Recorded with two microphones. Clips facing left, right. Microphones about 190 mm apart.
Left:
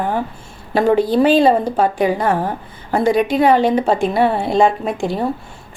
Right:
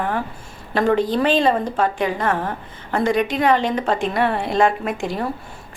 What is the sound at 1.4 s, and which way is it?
Speech, 35° left (ahead or behind).